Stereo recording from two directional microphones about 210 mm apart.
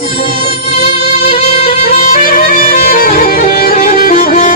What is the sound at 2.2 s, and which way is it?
Music, 40° left (ahead or behind).